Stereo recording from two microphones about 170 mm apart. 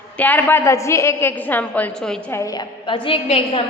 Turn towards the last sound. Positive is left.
turn(degrees=30)  # may be behind; listen again after turning